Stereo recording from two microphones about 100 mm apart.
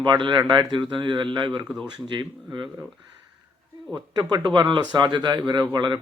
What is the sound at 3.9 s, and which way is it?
Speech, 45° right (ahead or behind).